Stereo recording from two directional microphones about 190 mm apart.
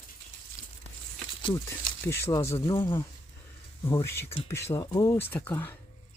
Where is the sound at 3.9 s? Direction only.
15° left (ahead or behind).